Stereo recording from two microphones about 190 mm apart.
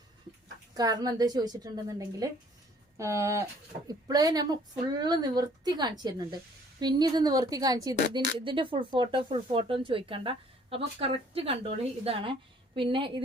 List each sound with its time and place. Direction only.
0.7 s speech: 20° right (ahead or behind)